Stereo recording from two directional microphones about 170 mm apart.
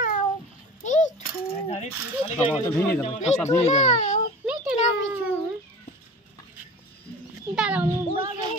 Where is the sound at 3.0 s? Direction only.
40° left (ahead or behind).